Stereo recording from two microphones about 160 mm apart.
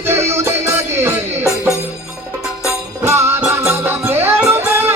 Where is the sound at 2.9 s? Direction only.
15° right (ahead or behind).